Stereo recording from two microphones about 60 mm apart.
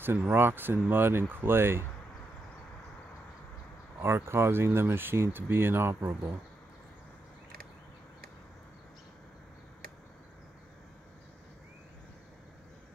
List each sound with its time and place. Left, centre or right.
0.3 s speech: right
4.0 s speech: right